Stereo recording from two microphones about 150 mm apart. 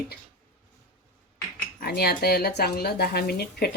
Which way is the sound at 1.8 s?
90° left.